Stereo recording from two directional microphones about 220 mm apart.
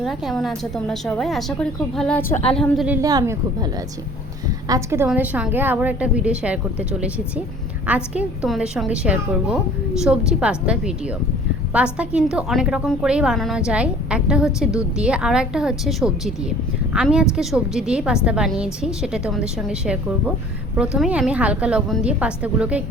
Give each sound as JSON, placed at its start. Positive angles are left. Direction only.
{"t": 0.0, "sound": "a woman's voice", "side_deg": 0}
{"t": 3.0, "sound": "a woman's voice", "side_deg": -15}